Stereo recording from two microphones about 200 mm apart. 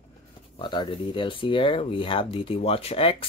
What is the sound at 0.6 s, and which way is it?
Speech, 25° left (ahead or behind).